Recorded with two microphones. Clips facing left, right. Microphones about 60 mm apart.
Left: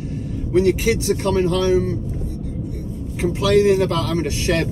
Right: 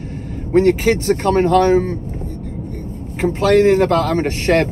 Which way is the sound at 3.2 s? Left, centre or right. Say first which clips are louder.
Right 3 dB; right.